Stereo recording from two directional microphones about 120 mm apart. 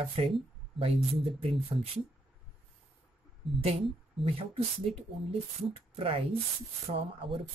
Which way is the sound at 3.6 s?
60° right (ahead or behind).